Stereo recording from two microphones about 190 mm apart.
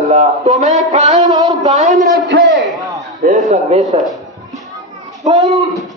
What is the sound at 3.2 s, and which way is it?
Speech, 40° right (ahead or behind).